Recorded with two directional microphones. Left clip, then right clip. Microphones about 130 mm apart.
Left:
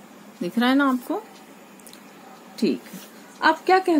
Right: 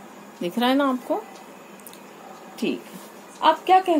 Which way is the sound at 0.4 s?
25° left (ahead or behind).